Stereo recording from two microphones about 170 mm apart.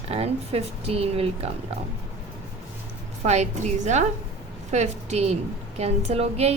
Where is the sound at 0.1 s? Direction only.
35° right (ahead or behind).